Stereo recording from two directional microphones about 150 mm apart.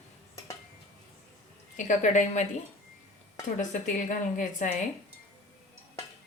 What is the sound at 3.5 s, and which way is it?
A woman's voice, 60° left (ahead or behind).